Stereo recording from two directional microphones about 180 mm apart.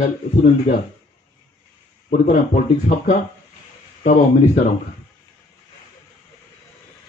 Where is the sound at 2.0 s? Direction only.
45° left (ahead or behind).